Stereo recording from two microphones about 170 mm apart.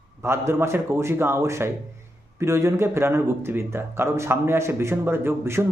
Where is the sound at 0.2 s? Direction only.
15° right (ahead or behind).